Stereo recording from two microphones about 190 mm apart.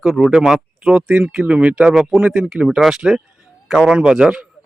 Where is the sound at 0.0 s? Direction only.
5° right (ahead or behind).